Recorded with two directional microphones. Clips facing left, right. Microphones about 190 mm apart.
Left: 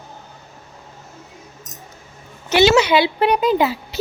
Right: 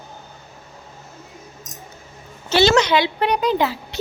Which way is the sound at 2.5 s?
15° left (ahead or behind).